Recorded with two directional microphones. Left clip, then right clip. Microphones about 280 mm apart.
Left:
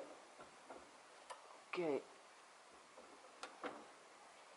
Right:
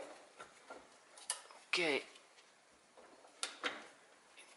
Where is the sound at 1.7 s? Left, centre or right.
Centre.